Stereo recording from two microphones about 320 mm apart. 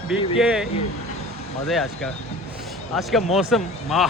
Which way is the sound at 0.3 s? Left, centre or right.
Centre.